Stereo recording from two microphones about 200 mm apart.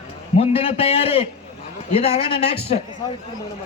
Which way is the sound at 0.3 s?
30° left (ahead or behind).